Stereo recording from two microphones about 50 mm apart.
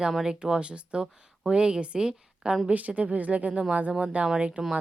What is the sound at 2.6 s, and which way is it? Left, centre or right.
Speech, right.